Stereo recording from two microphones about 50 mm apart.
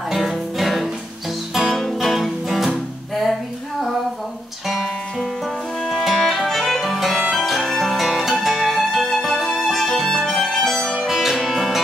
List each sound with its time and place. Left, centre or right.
0.1 s music: centre
5.9 s music: centre